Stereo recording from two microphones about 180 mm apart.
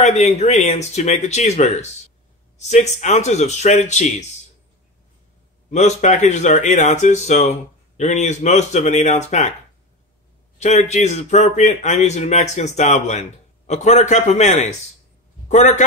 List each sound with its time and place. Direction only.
0.0 s speech: 35° left (ahead or behind)
5.7 s speech: 40° left (ahead or behind)
10.6 s a man's voice: 40° left (ahead or behind)